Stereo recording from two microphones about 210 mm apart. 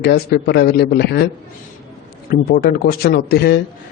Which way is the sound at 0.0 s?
50° left (ahead or behind).